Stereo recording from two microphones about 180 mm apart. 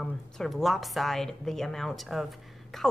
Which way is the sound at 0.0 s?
Centre (ahead or behind).